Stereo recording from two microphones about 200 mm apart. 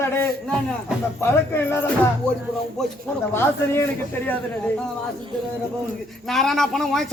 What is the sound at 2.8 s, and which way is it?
Speech, centre (ahead or behind).